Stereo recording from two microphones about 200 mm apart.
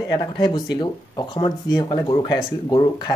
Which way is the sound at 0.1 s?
20° left (ahead or behind).